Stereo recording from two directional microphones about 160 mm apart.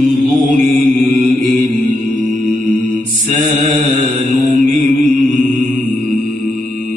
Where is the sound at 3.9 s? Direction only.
40° right (ahead or behind).